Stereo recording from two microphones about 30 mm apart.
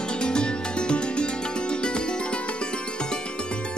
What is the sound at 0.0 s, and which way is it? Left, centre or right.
Music, left.